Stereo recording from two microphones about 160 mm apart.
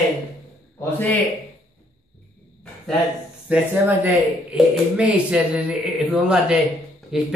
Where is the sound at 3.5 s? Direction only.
10° right (ahead or behind).